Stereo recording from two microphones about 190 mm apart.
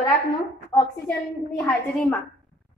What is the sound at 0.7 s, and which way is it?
Speech, 20° left (ahead or behind).